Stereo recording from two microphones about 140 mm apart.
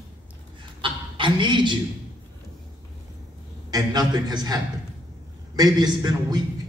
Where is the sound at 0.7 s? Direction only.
35° right (ahead or behind).